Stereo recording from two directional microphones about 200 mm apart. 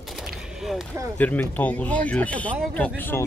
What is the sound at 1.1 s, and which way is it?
Speech, 10° left (ahead or behind).